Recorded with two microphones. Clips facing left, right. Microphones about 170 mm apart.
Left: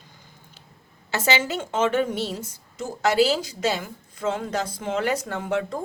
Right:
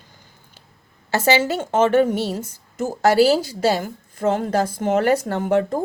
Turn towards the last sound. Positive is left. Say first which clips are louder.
# right 7 dB
turn(degrees=-45)  # may be behind; listen again after turning